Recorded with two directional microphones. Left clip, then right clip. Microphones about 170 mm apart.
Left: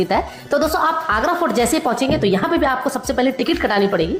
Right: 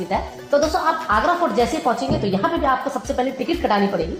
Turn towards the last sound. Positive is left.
turn(degrees=25)  # may be behind; listen again after turning